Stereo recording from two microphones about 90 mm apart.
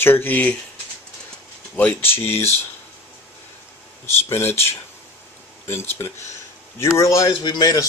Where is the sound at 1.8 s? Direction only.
20° left (ahead or behind).